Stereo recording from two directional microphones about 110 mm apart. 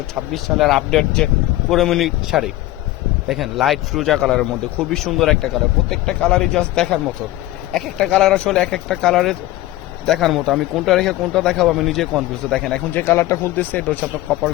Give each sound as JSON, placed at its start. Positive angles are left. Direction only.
{"t": 0.1, "sound": "speech", "side_deg": 0}
{"t": 13.0, "sound": "speech", "side_deg": 25}